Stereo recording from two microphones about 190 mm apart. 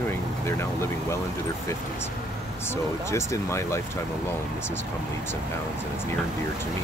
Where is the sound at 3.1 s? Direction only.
15° left (ahead or behind).